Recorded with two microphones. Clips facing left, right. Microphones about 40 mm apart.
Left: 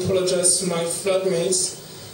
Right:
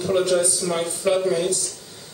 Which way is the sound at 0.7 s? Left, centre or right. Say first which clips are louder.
Right 1 dB; centre.